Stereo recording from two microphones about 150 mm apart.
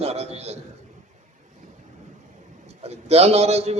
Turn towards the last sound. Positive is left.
turn(degrees=-45)  # may be behind; listen again after turning